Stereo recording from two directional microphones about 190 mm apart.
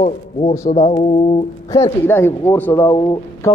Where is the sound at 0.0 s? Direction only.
35° left (ahead or behind).